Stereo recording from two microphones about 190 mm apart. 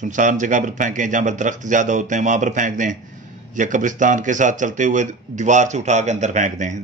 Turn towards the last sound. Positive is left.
turn(degrees=-40)  # may be behind; listen again after turning